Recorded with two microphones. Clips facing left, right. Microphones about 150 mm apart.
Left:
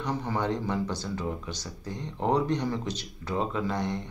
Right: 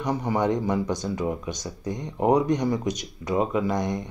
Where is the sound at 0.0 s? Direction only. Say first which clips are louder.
Right 5 dB; 15° right (ahead or behind).